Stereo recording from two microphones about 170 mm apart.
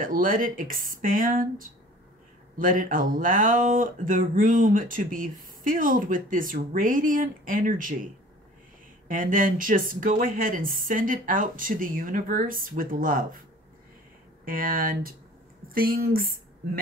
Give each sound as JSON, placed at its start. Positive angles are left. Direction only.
{"t": 0.0, "sound": "speech", "side_deg": -55}
{"t": 9.0, "sound": "speech", "side_deg": -55}
{"t": 14.4, "sound": "speech", "side_deg": -55}